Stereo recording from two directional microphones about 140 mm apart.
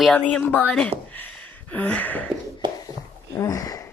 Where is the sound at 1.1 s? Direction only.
10° left (ahead or behind).